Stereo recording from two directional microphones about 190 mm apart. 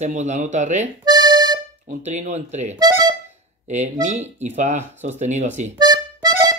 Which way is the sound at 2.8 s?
20° right (ahead or behind).